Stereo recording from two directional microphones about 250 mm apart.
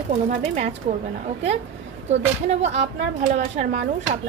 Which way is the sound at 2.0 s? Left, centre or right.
Right.